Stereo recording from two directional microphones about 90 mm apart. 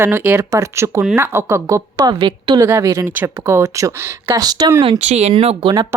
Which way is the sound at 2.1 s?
65° right (ahead or behind).